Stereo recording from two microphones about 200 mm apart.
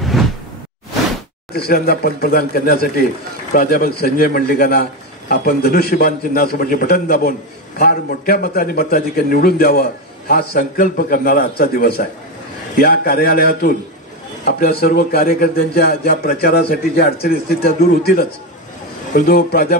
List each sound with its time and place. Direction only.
0.1 s whoosh: centre (ahead or behind)
1.5 s a man's voice: 50° left (ahead or behind)